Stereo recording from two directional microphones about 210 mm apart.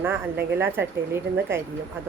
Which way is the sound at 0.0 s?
10° right (ahead or behind).